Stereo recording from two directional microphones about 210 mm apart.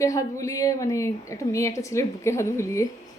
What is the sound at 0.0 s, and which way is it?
A woman's voice, 15° left (ahead or behind).